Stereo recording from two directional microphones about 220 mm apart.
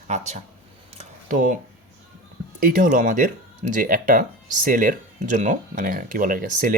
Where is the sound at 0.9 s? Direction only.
35° right (ahead or behind).